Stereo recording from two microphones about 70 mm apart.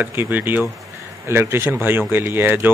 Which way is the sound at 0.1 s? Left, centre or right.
Right.